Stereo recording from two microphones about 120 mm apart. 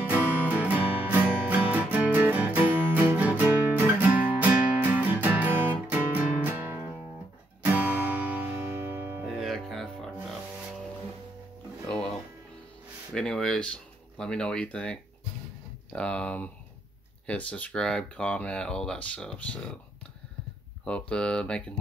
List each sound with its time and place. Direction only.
0.1 s music: 15° right (ahead or behind)
9.4 s music: centre (ahead or behind)
13.1 s speech: 5° left (ahead or behind)
20.8 s speech: 10° left (ahead or behind)